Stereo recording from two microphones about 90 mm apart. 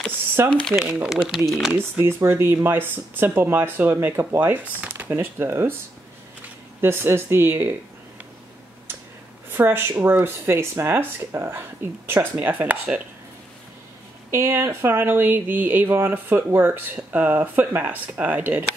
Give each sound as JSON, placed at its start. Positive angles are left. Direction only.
{"t": 0.4, "sound": "speech", "side_deg": -30}
{"t": 1.0, "sound": "speech", "side_deg": -5}
{"t": 2.0, "sound": "speech", "side_deg": -25}
{"t": 6.8, "sound": "speech", "side_deg": -25}
{"t": 9.5, "sound": "speech", "side_deg": -25}
{"t": 14.3, "sound": "speech", "side_deg": -30}